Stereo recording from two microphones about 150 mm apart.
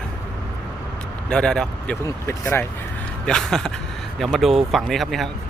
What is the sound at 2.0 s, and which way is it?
Speech, 15° left (ahead or behind).